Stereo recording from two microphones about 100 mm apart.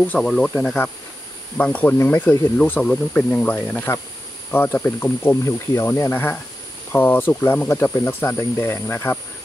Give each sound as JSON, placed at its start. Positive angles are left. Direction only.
{"t": 0.2, "sound": "speech", "side_deg": 5}
{"t": 0.6, "sound": "speech", "side_deg": 25}